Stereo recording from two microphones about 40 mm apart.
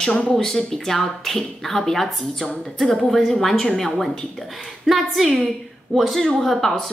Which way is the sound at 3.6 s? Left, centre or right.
Centre.